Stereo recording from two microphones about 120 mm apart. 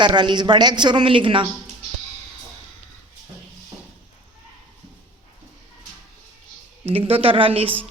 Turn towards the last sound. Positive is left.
turn(degrees=-50)  # may be behind; listen again after turning